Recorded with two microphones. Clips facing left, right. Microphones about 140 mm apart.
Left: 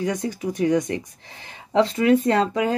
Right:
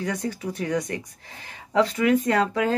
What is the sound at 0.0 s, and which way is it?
Speech, 20° left (ahead or behind).